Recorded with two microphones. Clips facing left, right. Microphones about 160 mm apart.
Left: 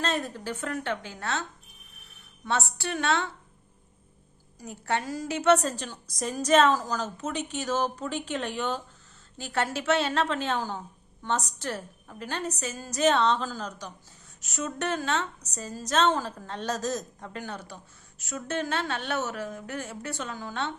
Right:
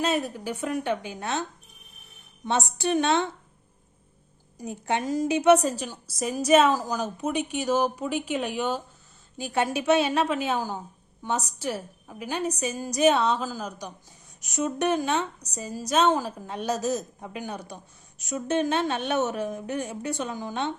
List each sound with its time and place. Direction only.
0.0 s a woman's voice: 10° right (ahead or behind)
4.5 s a woman's voice: 20° right (ahead or behind)